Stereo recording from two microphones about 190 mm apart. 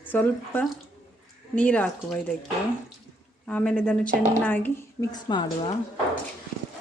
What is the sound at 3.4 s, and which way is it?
A woman's voice, 5° left (ahead or behind).